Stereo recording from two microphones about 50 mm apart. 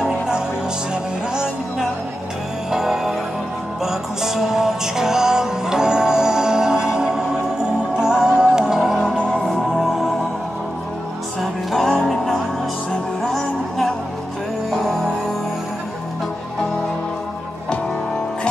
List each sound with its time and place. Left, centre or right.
2.7 s music: centre
11.7 s music: centre